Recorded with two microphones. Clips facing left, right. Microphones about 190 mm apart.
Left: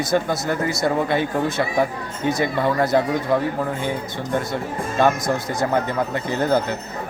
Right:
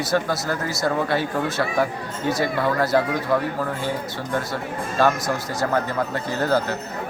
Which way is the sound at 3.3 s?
20° left (ahead or behind).